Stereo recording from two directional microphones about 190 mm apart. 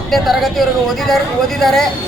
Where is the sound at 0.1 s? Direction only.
Centre (ahead or behind).